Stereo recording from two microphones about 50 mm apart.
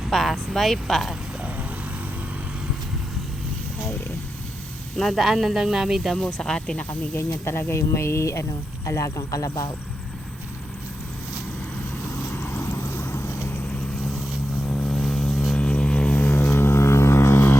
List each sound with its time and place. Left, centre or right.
0.1 s speech: centre
5.1 s speech: centre
6.1 s speech: centre
6.7 s speech: left
7.2 s speech: left
7.7 s speech: left
12.3 s vehicle: left
12.9 s clip-clop: left
14.7 s vehicle: centre
15.3 s a sound: centre
15.5 s a sound: left
16.5 s a sound: left